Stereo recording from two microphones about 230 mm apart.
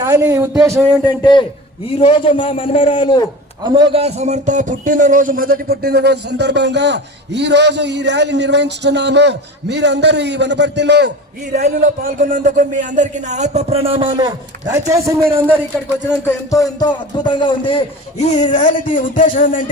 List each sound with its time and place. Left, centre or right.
0.0 s speech: centre
1.0 s a man's voice: centre
3.6 s a man's voice: centre; by 11.1 s right
11.5 s a man's voice: right; by 15.6 s centre
16.5 s a man's voice: centre; by 19.6 s left